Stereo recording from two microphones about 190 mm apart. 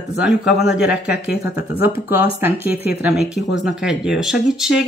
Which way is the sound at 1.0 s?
60° left (ahead or behind).